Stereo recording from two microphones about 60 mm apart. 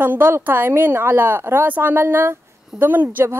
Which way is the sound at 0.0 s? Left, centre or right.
Right.